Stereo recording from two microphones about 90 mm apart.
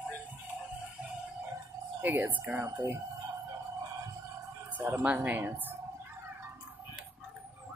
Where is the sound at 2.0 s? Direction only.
20° right (ahead or behind).